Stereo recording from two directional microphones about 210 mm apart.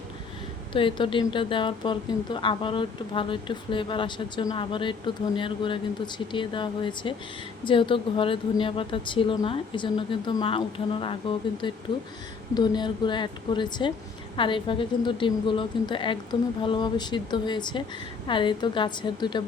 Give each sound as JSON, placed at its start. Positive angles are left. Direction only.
{"t": 0.7, "sound": "speech", "side_deg": 25}